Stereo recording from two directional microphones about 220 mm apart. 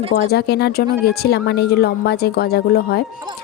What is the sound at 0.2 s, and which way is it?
Speech, 45° left (ahead or behind).